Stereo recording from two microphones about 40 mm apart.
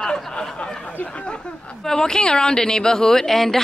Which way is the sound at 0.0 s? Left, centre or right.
Centre.